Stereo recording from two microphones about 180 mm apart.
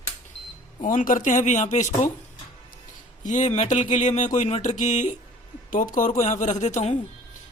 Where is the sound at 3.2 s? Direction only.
45° left (ahead or behind).